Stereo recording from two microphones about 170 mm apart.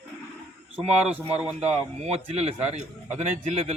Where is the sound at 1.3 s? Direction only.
5° right (ahead or behind).